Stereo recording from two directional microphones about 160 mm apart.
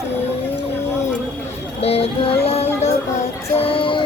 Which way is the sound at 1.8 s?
40° left (ahead or behind).